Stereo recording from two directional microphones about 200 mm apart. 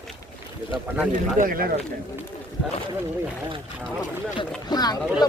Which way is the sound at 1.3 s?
45° right (ahead or behind).